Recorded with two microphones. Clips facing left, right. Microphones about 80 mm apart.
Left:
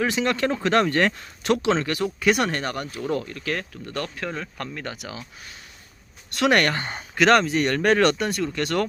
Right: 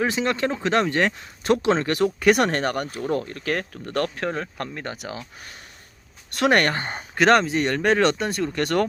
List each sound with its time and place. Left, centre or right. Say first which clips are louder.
0.0 s speech: even; right
1.6 s speech: right 2 dB; right
3.0 s speech: right 1 dB; right
6.3 s speech: right 1 dB; right
8.5 s speech: right 4 dB; right